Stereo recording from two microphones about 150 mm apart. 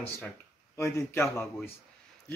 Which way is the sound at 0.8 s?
15° left (ahead or behind).